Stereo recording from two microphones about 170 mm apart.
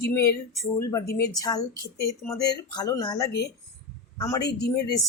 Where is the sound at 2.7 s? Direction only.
25° left (ahead or behind).